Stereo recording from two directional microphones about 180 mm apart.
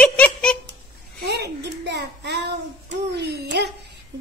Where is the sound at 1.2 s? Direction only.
65° right (ahead or behind).